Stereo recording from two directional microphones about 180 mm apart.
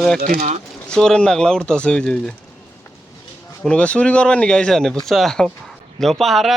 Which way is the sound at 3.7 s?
5° left (ahead or behind).